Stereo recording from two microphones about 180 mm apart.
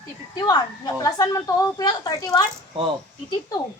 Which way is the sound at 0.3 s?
20° left (ahead or behind).